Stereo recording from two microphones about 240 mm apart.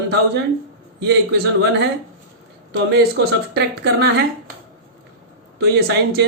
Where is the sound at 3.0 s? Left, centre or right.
Right.